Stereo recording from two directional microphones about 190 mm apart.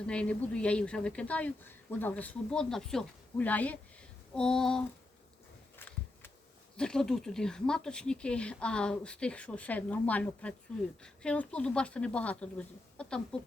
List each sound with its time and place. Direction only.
0.1 s speech: 5° left (ahead or behind)
5.7 s a sound: 10° left (ahead or behind)
6.7 s speech: 5° left (ahead or behind)